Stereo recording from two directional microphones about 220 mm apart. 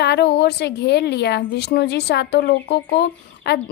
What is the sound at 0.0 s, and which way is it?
A woman's voice, 50° left (ahead or behind).